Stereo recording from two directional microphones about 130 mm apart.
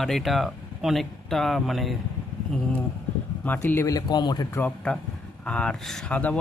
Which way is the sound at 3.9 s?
35° left (ahead or behind).